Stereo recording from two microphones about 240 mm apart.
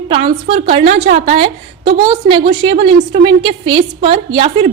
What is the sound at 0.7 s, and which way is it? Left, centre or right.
A woman's voice, right.